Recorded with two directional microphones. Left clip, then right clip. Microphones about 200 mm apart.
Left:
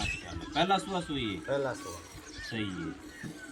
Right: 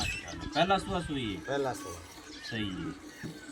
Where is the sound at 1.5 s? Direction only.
35° right (ahead or behind).